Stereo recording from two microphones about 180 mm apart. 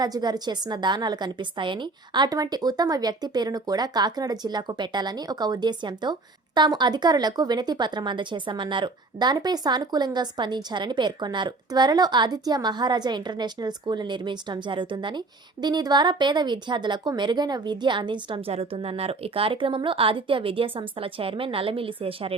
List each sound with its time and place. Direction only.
0.0 s a woman's voice: 25° right (ahead or behind)